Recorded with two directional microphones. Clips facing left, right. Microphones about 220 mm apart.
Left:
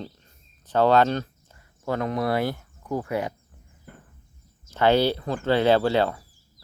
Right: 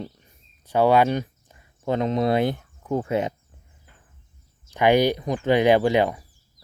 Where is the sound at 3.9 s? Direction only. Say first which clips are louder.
Left 13 dB; 55° left (ahead or behind).